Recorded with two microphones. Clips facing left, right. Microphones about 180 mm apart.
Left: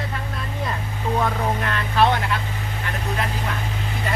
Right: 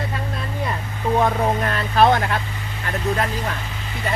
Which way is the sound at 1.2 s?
35° right (ahead or behind).